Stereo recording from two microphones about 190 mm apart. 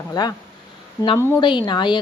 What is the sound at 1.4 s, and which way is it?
Speech, 25° left (ahead or behind).